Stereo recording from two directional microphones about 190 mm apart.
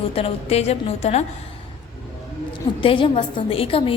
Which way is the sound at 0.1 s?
30° left (ahead or behind).